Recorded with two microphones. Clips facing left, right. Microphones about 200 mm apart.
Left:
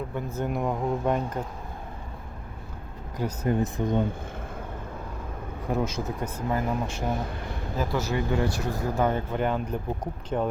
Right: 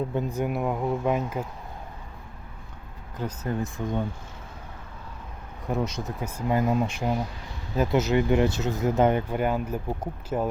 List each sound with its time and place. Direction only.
0.1 s speech: 20° right (ahead or behind)
3.2 s speech: 15° left (ahead or behind)
5.7 s speech: centre (ahead or behind)
6.2 s speech: 15° right (ahead or behind)
7.1 s speech: 55° left (ahead or behind)
7.8 s speech: 20° right (ahead or behind)